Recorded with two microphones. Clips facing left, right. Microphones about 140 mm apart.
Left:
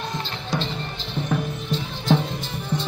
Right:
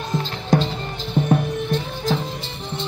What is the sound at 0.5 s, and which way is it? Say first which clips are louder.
Music: right 8 dB; 50° right (ahead or behind).